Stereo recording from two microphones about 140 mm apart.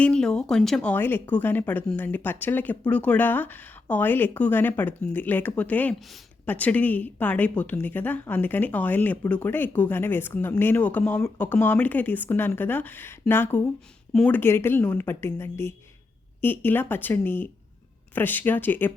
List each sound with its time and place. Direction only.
0.0 s speech: 5° left (ahead or behind)